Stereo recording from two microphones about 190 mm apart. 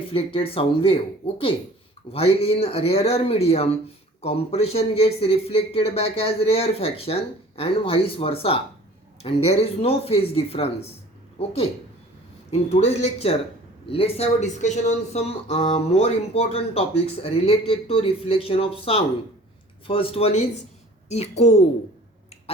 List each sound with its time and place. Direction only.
0.1 s speech: 30° left (ahead or behind)
2.1 s speech: 30° left (ahead or behind)